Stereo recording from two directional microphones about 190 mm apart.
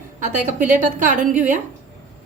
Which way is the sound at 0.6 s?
40° right (ahead or behind).